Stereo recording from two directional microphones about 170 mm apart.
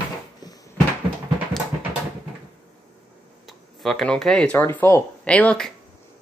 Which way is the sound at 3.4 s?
Centre (ahead or behind).